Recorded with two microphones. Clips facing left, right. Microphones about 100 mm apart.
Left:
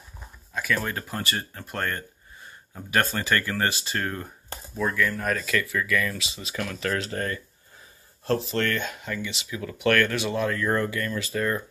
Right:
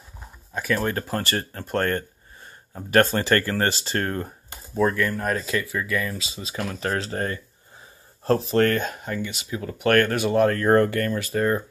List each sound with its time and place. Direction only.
0.5 s speech: 35° right (ahead or behind)
1.0 s speech: 45° right (ahead or behind); by 7.3 s 30° right (ahead or behind)
8.5 s speech: 40° right (ahead or behind)
11.3 s speech: 30° right (ahead or behind)